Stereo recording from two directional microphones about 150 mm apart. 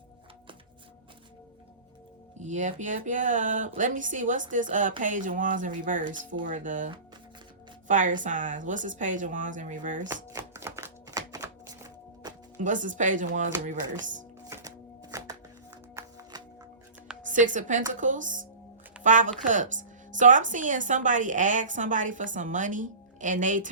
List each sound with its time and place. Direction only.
2.4 s a woman's voice: 55° right (ahead or behind)
10.3 s music: 20° right (ahead or behind)
12.5 s a woman's voice: 60° right (ahead or behind)
14.5 s chopping: 20° right (ahead or behind)
16.0 s music: 15° right (ahead or behind)
17.3 s a woman's voice: 60° right (ahead or behind)